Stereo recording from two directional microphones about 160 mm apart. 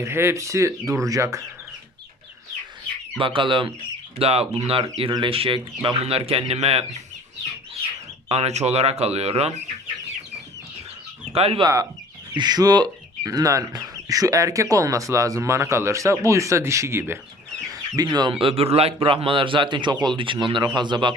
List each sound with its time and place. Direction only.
0.0 s speech: 15° right (ahead or behind)
3.2 s speech: 30° right (ahead or behind)
8.3 s speech: 40° right (ahead or behind)
11.3 s speech: 40° right (ahead or behind)
11.6 s speech: 20° right (ahead or behind)